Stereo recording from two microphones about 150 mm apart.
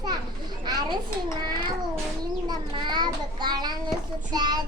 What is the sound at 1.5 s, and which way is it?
Child singing, 30° right (ahead or behind).